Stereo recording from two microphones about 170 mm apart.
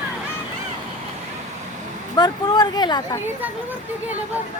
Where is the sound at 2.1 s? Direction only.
25° left (ahead or behind).